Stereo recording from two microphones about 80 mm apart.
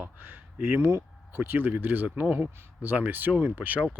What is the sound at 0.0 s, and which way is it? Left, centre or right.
Speech, right.